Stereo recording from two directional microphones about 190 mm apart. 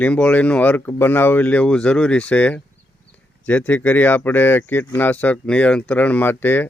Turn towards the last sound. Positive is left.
turn(degrees=10)  # may be behind; listen again after turning